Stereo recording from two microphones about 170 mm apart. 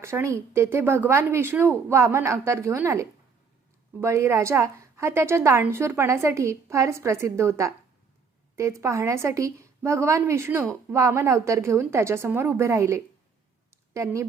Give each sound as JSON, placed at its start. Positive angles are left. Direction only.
{"t": 0.0, "sound": "a woman's voice", "side_deg": -15}